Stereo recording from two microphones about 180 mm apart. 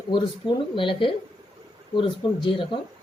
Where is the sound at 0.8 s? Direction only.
30° left (ahead or behind).